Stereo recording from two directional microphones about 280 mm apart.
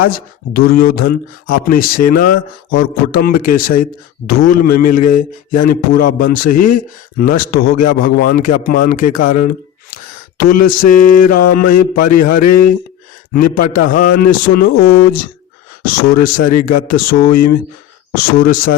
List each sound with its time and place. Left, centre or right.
0.0 s a man's voice: left
12.4 s speech: left
13.3 s a man's voice: left